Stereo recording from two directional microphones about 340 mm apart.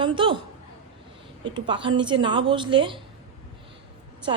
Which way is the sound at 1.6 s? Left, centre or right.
Centre.